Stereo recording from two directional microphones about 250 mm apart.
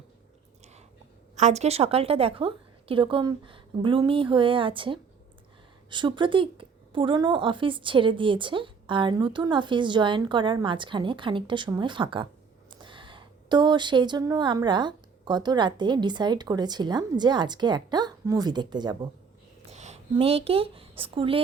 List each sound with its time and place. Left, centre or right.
1.4 s a woman's voice: right
19.7 s speech: right